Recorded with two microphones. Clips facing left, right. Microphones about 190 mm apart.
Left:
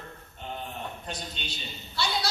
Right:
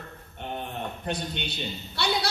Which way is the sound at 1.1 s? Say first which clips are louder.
Right 7 dB; 60° right (ahead or behind).